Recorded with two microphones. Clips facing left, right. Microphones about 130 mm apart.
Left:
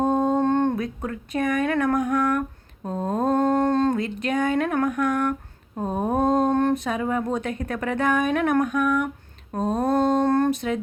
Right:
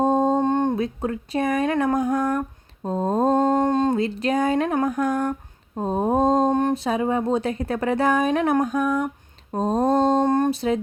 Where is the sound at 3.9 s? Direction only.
35° right (ahead or behind).